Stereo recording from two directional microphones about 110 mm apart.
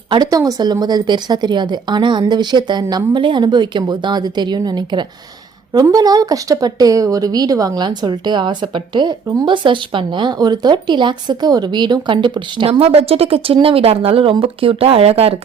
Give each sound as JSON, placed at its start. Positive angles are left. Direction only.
{"t": 0.1, "sound": "a woman's voice", "side_deg": -35}
{"t": 9.2, "sound": "a woman's voice", "side_deg": -30}
{"t": 9.5, "sound": "speech", "side_deg": -50}
{"t": 12.8, "sound": "speech", "side_deg": -65}